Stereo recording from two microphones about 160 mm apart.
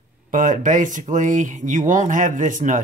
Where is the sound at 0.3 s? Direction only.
55° right (ahead or behind).